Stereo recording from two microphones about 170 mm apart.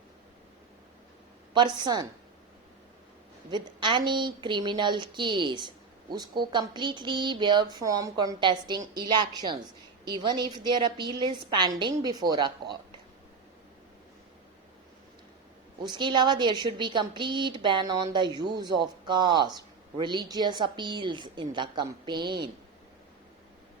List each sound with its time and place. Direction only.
1.5 s a woman's voice: 25° right (ahead or behind)
3.5 s a woman's voice: 25° right (ahead or behind)
15.8 s a woman's voice: 25° right (ahead or behind)